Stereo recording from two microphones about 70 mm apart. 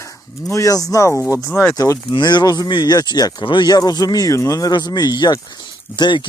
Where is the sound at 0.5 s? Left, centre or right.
Left.